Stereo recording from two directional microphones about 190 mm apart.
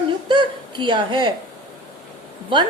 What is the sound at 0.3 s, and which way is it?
Chuckle, 25° right (ahead or behind).